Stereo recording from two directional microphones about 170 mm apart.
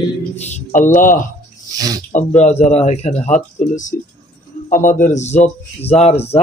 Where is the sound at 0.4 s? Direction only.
45° left (ahead or behind).